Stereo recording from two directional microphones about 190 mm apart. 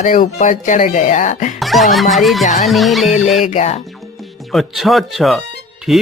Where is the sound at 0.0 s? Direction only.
45° left (ahead or behind).